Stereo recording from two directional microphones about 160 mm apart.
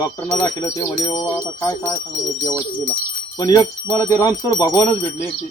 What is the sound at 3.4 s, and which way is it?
Speech, 20° left (ahead or behind).